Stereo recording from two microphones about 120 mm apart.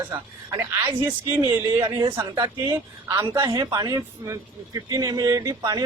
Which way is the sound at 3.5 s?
35° right (ahead or behind).